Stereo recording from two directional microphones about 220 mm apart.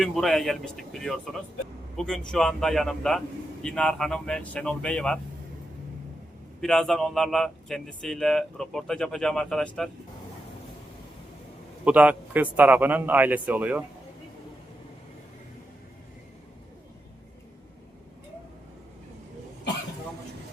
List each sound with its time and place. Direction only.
0.0 s speech: centre (ahead or behind)
6.6 s speech: centre (ahead or behind)
11.9 s speech: 5° right (ahead or behind)